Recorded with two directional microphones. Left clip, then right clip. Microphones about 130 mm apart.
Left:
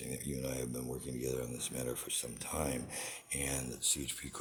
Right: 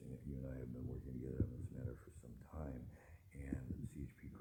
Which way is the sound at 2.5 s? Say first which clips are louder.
Left 15 dB; 40° left (ahead or behind).